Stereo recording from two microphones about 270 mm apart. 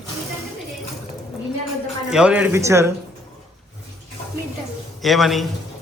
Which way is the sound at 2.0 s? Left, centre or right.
Centre.